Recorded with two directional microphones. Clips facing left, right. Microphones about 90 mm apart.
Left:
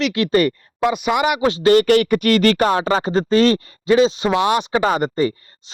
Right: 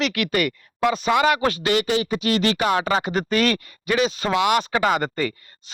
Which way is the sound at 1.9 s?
60° left (ahead or behind).